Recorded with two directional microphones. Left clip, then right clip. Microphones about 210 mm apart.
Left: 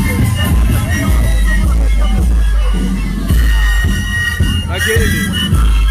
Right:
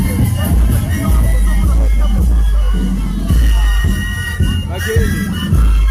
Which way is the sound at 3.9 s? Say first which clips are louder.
Left 5 dB; 30° right (ahead or behind).